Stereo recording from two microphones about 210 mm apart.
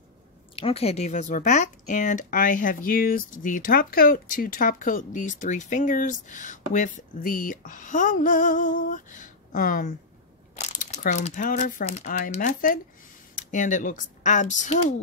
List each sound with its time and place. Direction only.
0.6 s speech: 25° left (ahead or behind)